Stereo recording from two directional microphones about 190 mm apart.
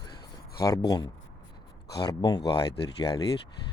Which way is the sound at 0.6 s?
20° left (ahead or behind).